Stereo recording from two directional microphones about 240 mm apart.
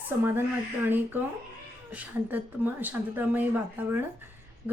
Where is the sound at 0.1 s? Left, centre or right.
Centre.